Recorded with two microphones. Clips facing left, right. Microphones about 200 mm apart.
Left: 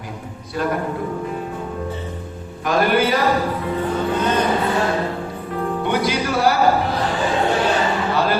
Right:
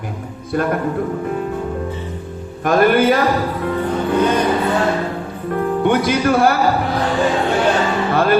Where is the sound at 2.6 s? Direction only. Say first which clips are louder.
Right 4 dB; 50° right (ahead or behind).